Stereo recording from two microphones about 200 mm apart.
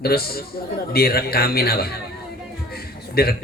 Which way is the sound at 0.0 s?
50° left (ahead or behind).